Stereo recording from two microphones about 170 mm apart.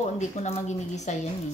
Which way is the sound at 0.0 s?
45° left (ahead or behind).